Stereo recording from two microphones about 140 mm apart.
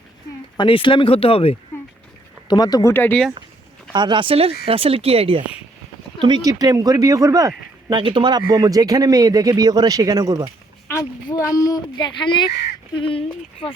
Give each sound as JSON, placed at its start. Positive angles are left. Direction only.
{"t": 0.5, "sound": "speech", "side_deg": 35}
{"t": 2.5, "sound": "speech", "side_deg": 30}
{"t": 2.9, "sound": "speech", "side_deg": 15}
{"t": 3.9, "sound": "speech", "side_deg": -35}
{"t": 6.2, "sound": "speech", "side_deg": -30}
{"t": 11.3, "sound": "speech", "side_deg": 25}